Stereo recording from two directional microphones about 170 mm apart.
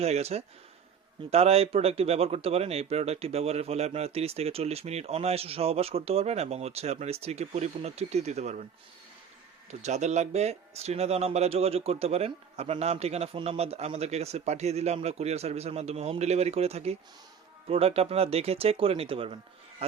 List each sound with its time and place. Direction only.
0.0 s a man's voice: 40° right (ahead or behind)
9.8 s a man's voice: 40° right (ahead or behind)